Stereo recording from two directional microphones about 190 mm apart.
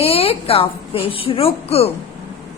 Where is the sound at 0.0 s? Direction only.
30° left (ahead or behind).